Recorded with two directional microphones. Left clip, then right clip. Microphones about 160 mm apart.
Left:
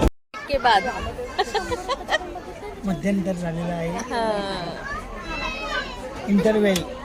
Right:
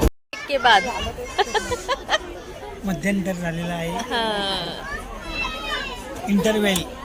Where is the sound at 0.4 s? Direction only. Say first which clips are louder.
Right 2 dB; 10° right (ahead or behind).